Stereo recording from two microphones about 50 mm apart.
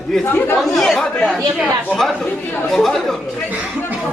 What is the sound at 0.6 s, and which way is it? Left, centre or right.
A man's voice, centre.